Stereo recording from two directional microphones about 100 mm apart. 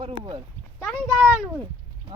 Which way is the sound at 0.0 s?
55° right (ahead or behind).